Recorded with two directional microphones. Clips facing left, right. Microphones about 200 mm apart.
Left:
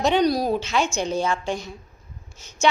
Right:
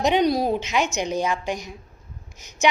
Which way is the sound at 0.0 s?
15° right (ahead or behind).